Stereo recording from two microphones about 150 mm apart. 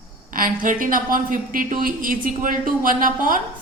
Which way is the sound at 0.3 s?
65° right (ahead or behind).